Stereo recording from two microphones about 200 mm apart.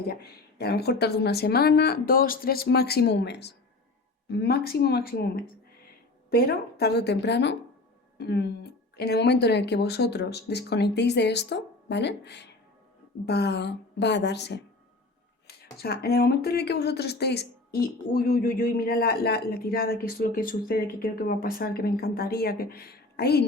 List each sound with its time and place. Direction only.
0.1 s speech: 55° left (ahead or behind)